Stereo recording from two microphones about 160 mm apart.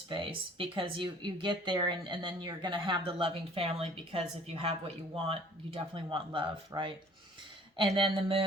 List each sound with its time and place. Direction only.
0.1 s speech: 30° right (ahead or behind)
7.9 s speech: 30° right (ahead or behind)